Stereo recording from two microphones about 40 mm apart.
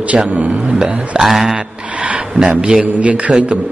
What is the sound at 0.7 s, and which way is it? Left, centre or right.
Speech, right.